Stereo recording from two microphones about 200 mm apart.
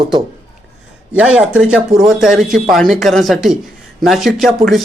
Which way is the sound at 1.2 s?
5° right (ahead or behind).